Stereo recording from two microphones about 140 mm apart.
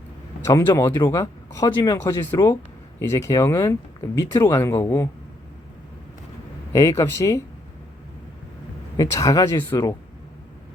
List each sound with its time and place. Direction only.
0.4 s speech: 20° left (ahead or behind)
6.7 s speech: 20° left (ahead or behind)
9.0 s speech: 25° left (ahead or behind)